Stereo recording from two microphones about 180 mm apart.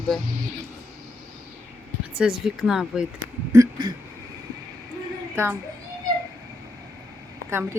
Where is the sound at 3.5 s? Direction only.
20° right (ahead or behind).